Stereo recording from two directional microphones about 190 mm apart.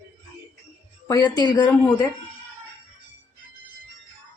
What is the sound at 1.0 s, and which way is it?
Speech, 15° left (ahead or behind).